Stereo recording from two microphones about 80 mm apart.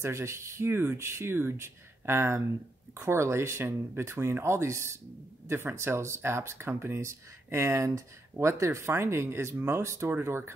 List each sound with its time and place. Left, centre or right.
0.0 s speech: right